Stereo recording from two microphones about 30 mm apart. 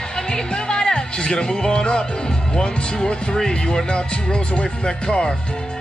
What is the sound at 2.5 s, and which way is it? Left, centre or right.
Speech, left.